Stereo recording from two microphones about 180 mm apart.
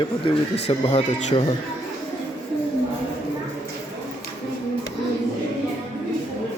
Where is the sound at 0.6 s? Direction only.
35° left (ahead or behind).